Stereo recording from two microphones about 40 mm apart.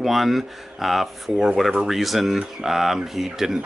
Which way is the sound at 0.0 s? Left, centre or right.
Centre.